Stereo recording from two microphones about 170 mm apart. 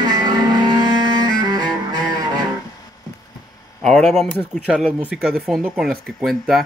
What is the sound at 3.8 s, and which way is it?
Speech, centre (ahead or behind).